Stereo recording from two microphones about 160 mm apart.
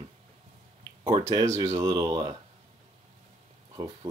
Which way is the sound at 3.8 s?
25° right (ahead or behind).